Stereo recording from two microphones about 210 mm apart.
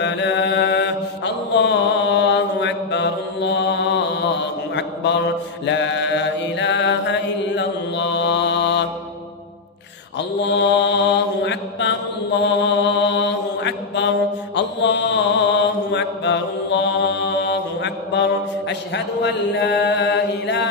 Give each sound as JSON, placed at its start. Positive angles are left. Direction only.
{"t": 0.0, "sound": "mantra", "side_deg": 55}
{"t": 4.7, "sound": "a sound", "side_deg": 55}
{"t": 5.7, "sound": "mantra", "side_deg": 55}
{"t": 10.1, "sound": "mantra", "side_deg": 55}